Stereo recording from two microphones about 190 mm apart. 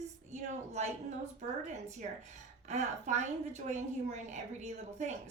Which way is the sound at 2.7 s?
40° right (ahead or behind).